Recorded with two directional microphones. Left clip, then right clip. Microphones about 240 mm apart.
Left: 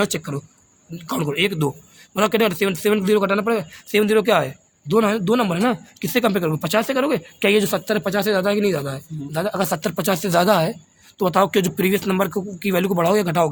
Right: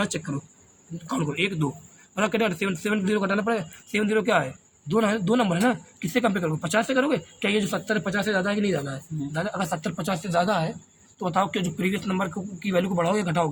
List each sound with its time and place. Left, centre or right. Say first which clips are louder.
0.0 s a man's voice: left 6 dB; left